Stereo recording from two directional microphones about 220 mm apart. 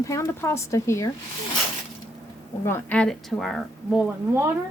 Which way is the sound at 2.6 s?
10° left (ahead or behind).